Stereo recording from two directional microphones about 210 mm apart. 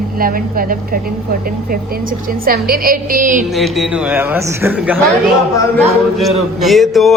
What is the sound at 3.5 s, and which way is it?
Speech, centre (ahead or behind).